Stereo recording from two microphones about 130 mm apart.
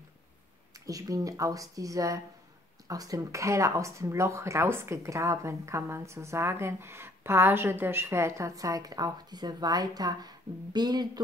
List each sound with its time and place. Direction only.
0.8 s speech: 25° right (ahead or behind)